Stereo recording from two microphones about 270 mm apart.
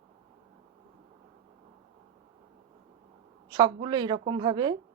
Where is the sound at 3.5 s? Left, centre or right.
Centre.